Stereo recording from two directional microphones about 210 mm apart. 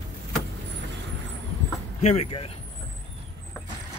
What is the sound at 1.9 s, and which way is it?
Speech, 30° left (ahead or behind).